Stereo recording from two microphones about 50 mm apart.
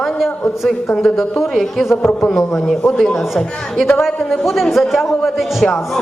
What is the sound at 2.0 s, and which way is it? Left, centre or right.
Speech, left.